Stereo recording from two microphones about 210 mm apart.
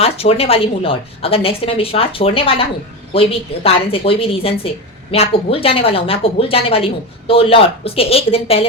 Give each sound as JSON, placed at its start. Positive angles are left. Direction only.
{"t": 0.0, "sound": "a woman's voice", "side_deg": 30}